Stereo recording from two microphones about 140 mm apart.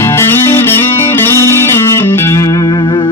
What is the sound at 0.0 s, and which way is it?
Music, 15° left (ahead or behind).